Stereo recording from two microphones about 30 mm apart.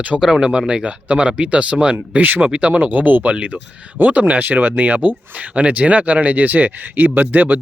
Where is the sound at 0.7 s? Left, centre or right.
Right.